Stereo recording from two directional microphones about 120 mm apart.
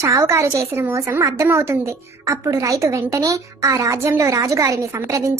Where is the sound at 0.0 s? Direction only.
25° right (ahead or behind).